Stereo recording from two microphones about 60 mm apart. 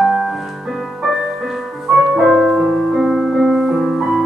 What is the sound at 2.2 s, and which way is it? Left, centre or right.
Music, centre.